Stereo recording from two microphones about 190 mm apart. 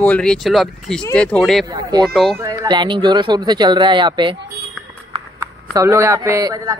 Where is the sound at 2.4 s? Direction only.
20° right (ahead or behind).